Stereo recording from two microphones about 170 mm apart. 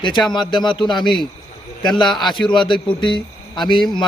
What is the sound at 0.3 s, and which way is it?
A man's voice, 25° left (ahead or behind).